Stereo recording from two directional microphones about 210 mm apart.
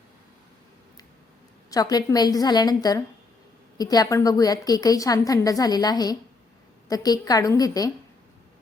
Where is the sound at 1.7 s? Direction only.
20° left (ahead or behind).